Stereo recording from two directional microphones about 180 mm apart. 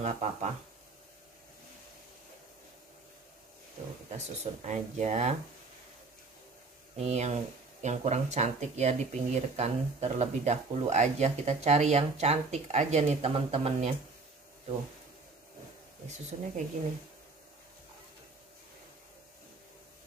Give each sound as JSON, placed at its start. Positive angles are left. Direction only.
{"t": 0.0, "sound": "speech", "side_deg": -40}
{"t": 4.4, "sound": "speech", "side_deg": -40}
{"t": 7.0, "sound": "speech", "side_deg": -40}
{"t": 16.3, "sound": "speech", "side_deg": -40}